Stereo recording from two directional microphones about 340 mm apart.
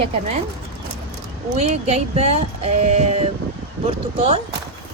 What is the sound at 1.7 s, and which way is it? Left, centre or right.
Speech, centre.